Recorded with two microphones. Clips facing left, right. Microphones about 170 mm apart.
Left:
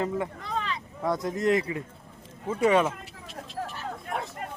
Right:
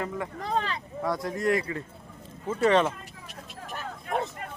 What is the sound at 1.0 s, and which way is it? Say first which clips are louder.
Speech: left 2 dB; 20° left (ahead or behind).